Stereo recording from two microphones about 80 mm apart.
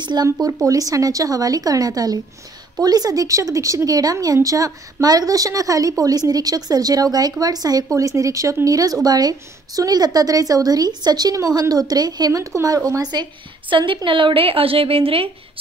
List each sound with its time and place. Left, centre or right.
0.0 s a woman's voice: right